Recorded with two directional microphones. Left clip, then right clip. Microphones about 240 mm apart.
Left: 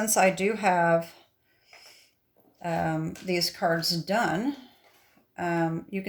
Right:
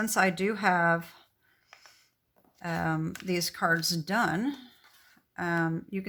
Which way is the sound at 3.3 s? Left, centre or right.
Right.